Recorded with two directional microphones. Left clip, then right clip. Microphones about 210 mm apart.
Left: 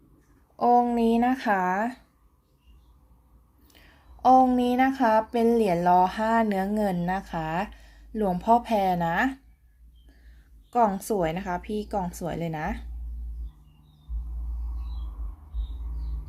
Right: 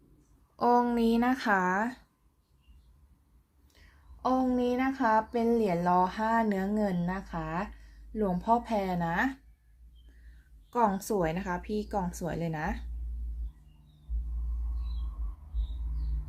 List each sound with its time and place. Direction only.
0.5 s speech: 5° right (ahead or behind)
4.2 s speech: 20° left (ahead or behind)
10.7 s speech: 5° left (ahead or behind)